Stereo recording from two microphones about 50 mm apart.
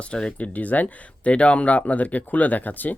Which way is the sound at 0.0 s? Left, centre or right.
Left.